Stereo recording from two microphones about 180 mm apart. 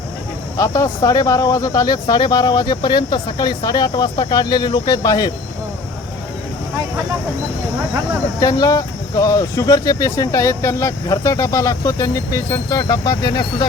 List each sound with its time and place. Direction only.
0.5 s speech: 20° left (ahead or behind)
8.4 s speech: 20° left (ahead or behind)